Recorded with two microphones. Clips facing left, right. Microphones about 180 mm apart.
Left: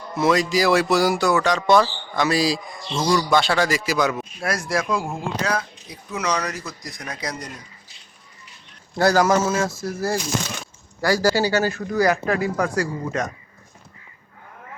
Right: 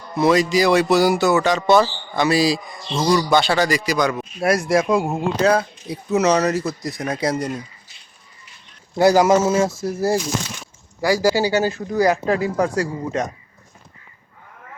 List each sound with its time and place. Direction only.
0.2 s speech: centre (ahead or behind)
4.4 s speech: 25° right (ahead or behind)
9.0 s speech: 15° right (ahead or behind)
11.0 s speech: 15° right (ahead or behind)